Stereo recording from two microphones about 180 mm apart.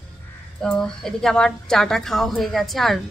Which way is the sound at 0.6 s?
5° left (ahead or behind).